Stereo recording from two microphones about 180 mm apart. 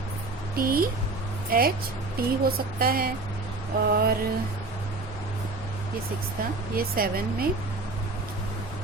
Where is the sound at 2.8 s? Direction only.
55° right (ahead or behind).